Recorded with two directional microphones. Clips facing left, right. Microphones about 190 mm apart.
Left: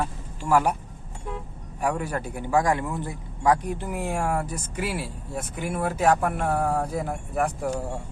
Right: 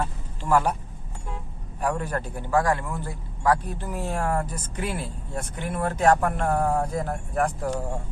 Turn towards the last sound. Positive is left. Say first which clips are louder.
# even
turn(degrees=10)  # may be behind; listen again after turning